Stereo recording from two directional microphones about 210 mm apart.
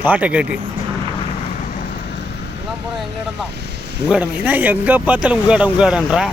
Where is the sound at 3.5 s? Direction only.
50° right (ahead or behind).